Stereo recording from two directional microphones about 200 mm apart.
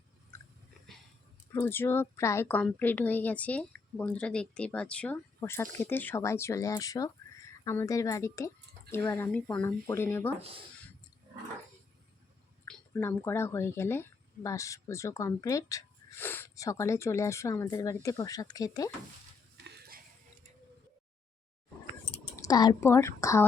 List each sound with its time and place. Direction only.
1.5 s speech: 10° left (ahead or behind)
12.6 s speech: 10° left (ahead or behind)
19.6 s a sound: 55° right (ahead or behind)
22.4 s speech: 20° left (ahead or behind)